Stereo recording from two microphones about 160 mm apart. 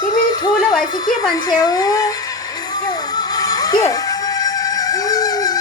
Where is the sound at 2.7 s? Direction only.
25° left (ahead or behind).